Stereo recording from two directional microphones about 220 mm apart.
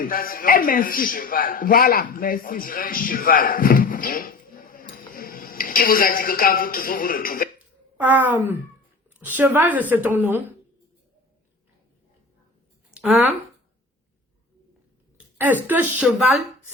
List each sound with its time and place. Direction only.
0.0 s a man's voice: 40° left (ahead or behind)
8.0 s speech: 10° right (ahead or behind)
12.9 s a sound: 5° right (ahead or behind)
15.4 s speech: 10° right (ahead or behind)